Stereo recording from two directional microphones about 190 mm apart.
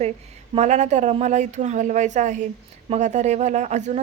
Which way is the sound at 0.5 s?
35° right (ahead or behind).